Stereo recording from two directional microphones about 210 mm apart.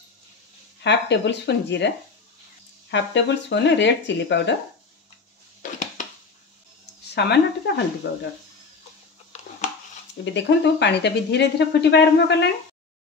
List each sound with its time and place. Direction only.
0.8 s speech: 55° left (ahead or behind)
2.9 s speech: 60° left (ahead or behind)
7.2 s speech: 55° left (ahead or behind)
10.2 s speech: 55° left (ahead or behind)